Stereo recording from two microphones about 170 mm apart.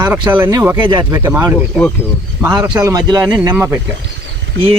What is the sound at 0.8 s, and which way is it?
Speech, 30° right (ahead or behind).